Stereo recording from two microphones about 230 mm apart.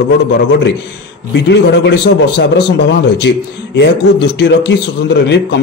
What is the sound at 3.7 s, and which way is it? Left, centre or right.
A man's voice, left.